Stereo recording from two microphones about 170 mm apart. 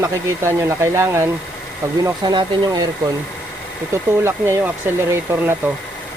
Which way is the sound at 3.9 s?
15° right (ahead or behind).